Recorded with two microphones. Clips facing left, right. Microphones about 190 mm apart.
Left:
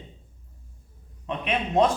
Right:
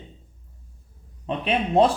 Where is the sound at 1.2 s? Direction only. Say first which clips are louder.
Right 3 dB; 30° right (ahead or behind).